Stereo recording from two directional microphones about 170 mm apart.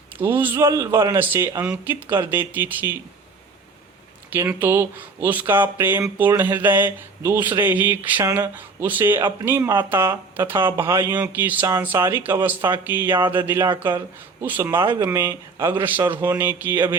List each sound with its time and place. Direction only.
0.2 s speech: 10° right (ahead or behind)
4.3 s speech: 10° right (ahead or behind)